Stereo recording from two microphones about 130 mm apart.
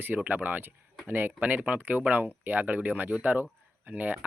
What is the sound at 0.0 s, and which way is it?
Speech, 15° right (ahead or behind).